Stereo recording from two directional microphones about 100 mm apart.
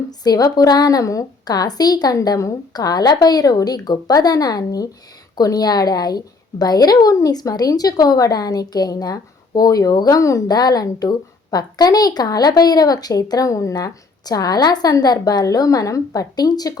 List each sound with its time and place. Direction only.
0.1 s a woman's voice: 40° left (ahead or behind)